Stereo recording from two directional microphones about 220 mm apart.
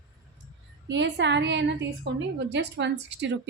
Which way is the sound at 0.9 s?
55° right (ahead or behind).